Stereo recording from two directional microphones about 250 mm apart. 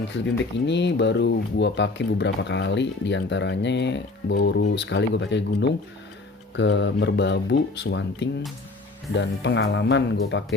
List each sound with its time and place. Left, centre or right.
0.1 s speech: left